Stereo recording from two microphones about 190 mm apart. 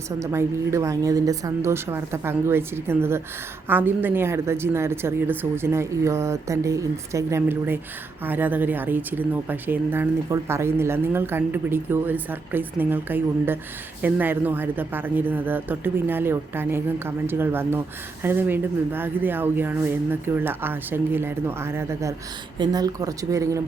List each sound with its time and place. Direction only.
0.2 s speech: 15° right (ahead or behind)